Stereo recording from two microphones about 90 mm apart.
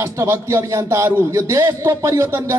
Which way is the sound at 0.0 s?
30° right (ahead or behind).